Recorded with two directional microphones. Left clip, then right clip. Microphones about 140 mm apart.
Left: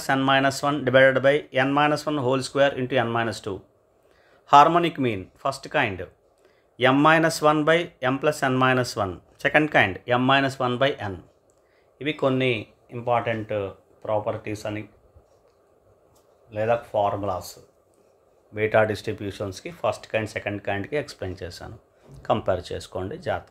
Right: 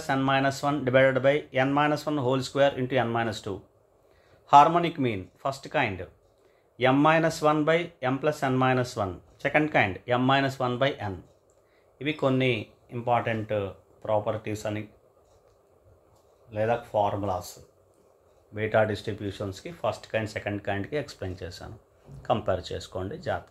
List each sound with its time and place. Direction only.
0.0 s speech: 35° left (ahead or behind); by 14.9 s 5° right (ahead or behind)
16.4 s speech: 10° left (ahead or behind)
18.5 s speech: 25° left (ahead or behind)